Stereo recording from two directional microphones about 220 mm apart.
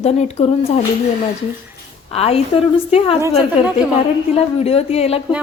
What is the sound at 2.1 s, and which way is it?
A woman's voice, 25° left (ahead or behind).